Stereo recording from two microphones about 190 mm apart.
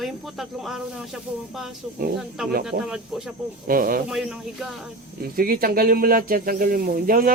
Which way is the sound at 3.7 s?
50° right (ahead or behind).